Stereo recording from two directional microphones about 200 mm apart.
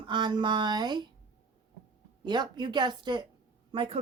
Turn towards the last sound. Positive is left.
turn(degrees=-25)  # may be behind; listen again after turning